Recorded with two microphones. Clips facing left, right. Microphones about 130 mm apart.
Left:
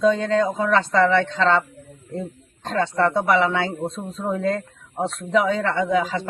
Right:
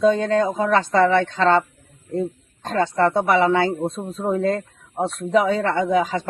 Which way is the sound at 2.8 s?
30° right (ahead or behind).